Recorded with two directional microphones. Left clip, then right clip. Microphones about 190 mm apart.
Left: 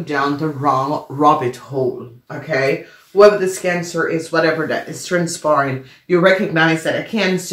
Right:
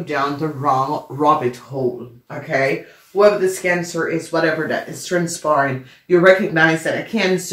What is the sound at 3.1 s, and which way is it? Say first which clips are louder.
Speech: left 3 dB; 35° left (ahead or behind).